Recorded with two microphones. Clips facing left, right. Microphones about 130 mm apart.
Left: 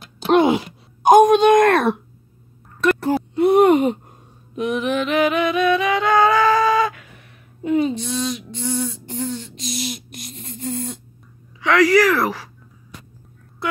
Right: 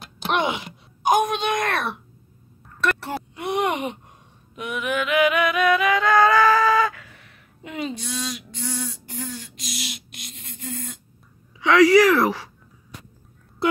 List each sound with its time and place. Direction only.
0.3 s speech: 35° left (ahead or behind)
3.3 s groan: 35° left (ahead or behind)
4.6 s singing: 30° left (ahead or behind)
7.6 s speech: 25° left (ahead or behind)
9.8 s a sound: 45° left (ahead or behind)
11.6 s speech: 20° right (ahead or behind)